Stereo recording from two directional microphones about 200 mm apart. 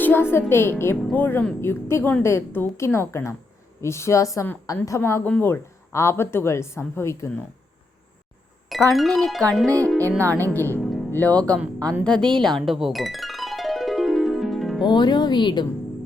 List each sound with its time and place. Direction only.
0.0 s a woman's voice: 10° left (ahead or behind)
8.9 s a woman's voice: centre (ahead or behind)
10.1 s speech: 15° right (ahead or behind)
10.3 s a woman's voice: 10° left (ahead or behind)
10.8 s music: centre (ahead or behind)
11.1 s a woman's voice: 10° left (ahead or behind)
12.0 s music: 5° left (ahead or behind)
14.8 s speech: 20° left (ahead or behind)